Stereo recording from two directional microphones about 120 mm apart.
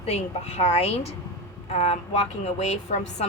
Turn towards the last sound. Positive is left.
turn(degrees=65)  # may be behind; listen again after turning